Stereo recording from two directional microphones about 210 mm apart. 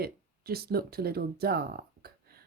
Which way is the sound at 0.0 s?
45° right (ahead or behind).